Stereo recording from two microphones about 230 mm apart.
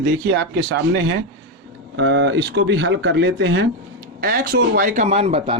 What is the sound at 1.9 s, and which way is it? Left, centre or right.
A man's voice, right.